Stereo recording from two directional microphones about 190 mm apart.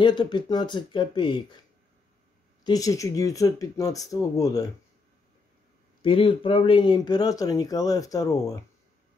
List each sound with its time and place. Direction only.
0.0 s speech: 25° left (ahead or behind)
2.6 s speech: 20° left (ahead or behind)
6.0 s speech: 25° left (ahead or behind)